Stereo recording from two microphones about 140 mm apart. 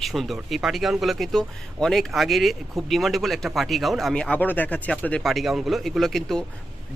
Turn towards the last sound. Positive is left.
turn(degrees=0)  # may be behind; listen again after turning